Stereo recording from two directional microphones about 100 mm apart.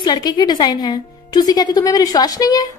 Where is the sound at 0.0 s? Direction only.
45° left (ahead or behind).